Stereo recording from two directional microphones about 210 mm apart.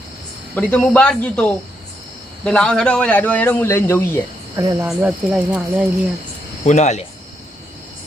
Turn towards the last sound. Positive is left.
turn(degrees=35)  # may be behind; listen again after turning